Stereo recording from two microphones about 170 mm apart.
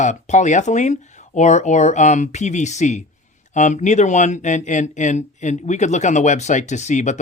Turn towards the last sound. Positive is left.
turn(degrees=45)  # may be behind; listen again after turning